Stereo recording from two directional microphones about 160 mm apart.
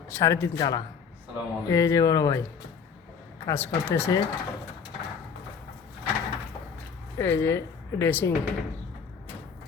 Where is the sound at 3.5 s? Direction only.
15° left (ahead or behind).